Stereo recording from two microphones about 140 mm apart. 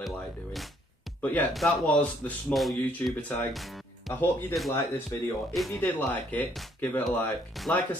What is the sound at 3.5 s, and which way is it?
Speech, centre (ahead or behind).